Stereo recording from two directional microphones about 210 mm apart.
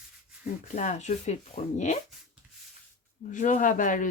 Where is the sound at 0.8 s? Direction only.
35° left (ahead or behind).